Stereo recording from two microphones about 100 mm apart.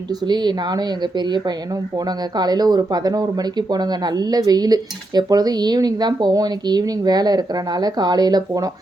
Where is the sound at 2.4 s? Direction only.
40° right (ahead or behind).